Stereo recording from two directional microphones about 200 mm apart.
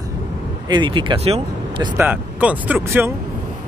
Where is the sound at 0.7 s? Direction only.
25° right (ahead or behind).